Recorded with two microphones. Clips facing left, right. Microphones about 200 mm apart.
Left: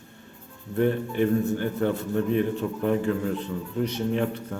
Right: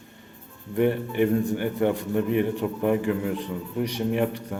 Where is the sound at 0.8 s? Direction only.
15° right (ahead or behind).